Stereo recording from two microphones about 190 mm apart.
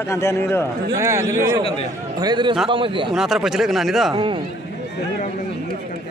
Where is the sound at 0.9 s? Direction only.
15° right (ahead or behind).